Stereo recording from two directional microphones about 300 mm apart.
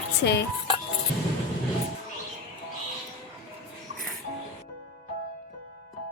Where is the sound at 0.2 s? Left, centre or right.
Left.